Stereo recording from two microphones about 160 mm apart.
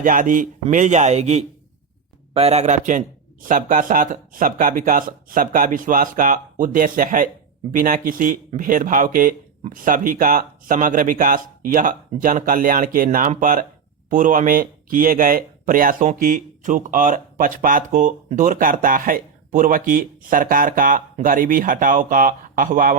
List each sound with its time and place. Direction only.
0.0 s speech: 55° right (ahead or behind)